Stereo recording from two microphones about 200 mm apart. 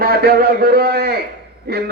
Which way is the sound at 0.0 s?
50° right (ahead or behind).